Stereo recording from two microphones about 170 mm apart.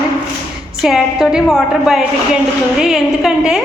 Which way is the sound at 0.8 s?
5° right (ahead or behind).